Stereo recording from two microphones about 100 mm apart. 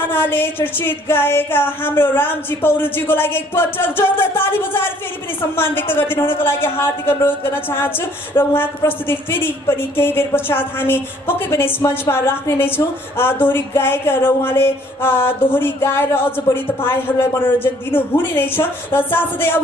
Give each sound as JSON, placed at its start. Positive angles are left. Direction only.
{"t": 0.1, "sound": "a woman's voice", "side_deg": 20}